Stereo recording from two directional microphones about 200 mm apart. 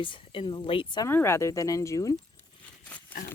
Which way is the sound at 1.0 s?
15° left (ahead or behind).